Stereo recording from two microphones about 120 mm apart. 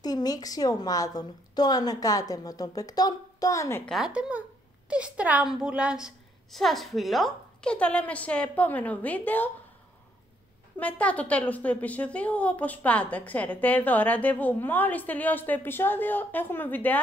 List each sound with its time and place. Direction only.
0.0 s a woman's voice: 35° left (ahead or behind)
3.8 s a woman's voice: centre (ahead or behind)
4.1 s a woman's voice: 10° right (ahead or behind); by 9.5 s 15° left (ahead or behind)
10.8 s a woman's voice: 10° left (ahead or behind)